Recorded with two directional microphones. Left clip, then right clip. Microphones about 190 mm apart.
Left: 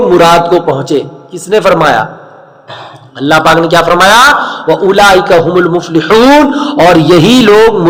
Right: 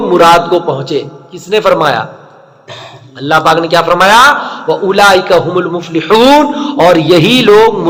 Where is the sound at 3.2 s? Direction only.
40° left (ahead or behind).